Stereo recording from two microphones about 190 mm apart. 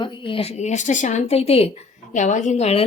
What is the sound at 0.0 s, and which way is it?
A woman's voice, 25° left (ahead or behind).